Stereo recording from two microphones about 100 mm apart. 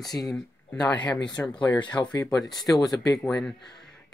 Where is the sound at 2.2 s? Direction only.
5° left (ahead or behind).